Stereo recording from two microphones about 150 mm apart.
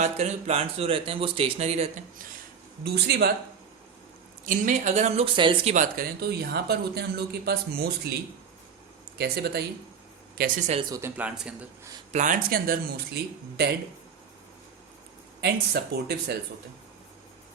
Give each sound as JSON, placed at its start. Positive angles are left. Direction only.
{"t": 0.0, "sound": "speech", "side_deg": -45}
{"t": 2.8, "sound": "speech", "side_deg": -90}
{"t": 4.4, "sound": "speech", "side_deg": -60}
{"t": 5.7, "sound": "speech", "side_deg": -70}
{"t": 10.3, "sound": "speech", "side_deg": -70}
{"t": 10.7, "sound": "speech", "side_deg": -35}
{"t": 11.2, "sound": "speech", "side_deg": -5}
{"t": 12.1, "sound": "speech", "side_deg": -60}
{"t": 13.2, "sound": "speech", "side_deg": -90}
{"t": 15.4, "sound": "speech", "side_deg": -90}